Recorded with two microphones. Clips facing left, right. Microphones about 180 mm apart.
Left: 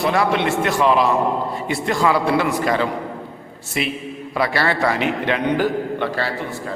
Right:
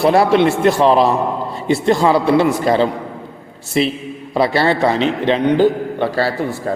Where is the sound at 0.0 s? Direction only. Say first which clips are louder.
Right 7 dB; 35° right (ahead or behind).